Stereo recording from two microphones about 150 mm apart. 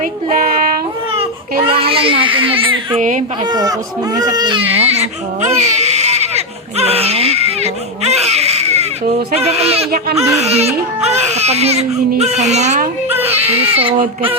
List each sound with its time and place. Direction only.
0.3 s a sound: 70° right (ahead or behind)
1.1 s a child's voice: 35° right (ahead or behind)
3.0 s speech: 60° right (ahead or behind)
3.4 s speech: 25° right (ahead or behind)